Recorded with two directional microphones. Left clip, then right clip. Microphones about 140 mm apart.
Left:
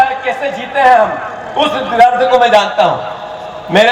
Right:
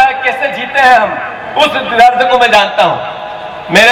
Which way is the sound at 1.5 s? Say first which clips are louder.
Right 2 dB; 20° right (ahead or behind).